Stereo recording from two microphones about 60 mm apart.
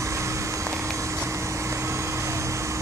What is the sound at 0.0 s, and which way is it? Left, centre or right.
Vehicle, right.